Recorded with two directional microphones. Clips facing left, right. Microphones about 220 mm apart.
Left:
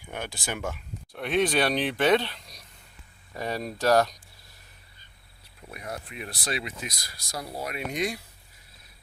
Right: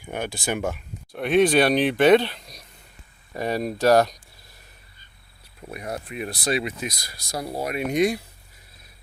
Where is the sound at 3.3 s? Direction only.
15° right (ahead or behind).